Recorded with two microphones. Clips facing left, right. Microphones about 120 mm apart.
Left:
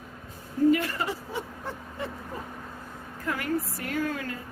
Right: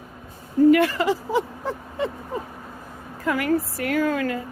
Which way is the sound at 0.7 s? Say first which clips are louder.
Right 8 dB; 90° right.